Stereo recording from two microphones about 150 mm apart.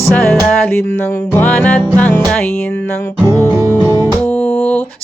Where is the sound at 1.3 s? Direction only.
10° left (ahead or behind).